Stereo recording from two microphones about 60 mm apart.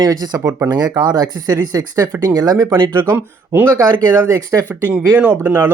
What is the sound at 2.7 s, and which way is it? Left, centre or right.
Speech, right.